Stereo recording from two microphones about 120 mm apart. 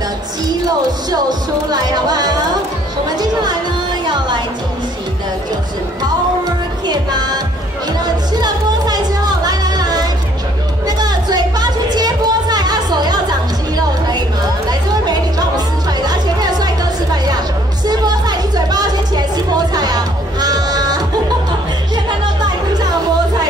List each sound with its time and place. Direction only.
1.7 s music: 35° right (ahead or behind)
4.0 s music: 40° right (ahead or behind)
6.9 s music: 35° right (ahead or behind)
17.8 s a sound: 35° right (ahead or behind)
21.5 s music: 40° right (ahead or behind)